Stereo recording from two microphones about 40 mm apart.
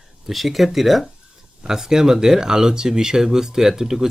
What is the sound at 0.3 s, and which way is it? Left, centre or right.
Speech, centre.